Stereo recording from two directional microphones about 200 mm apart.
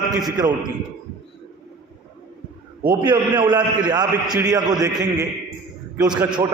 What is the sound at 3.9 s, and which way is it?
Mantra, 20° right (ahead or behind).